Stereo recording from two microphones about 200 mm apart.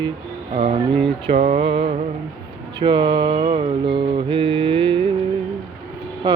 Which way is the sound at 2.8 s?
25° right (ahead or behind).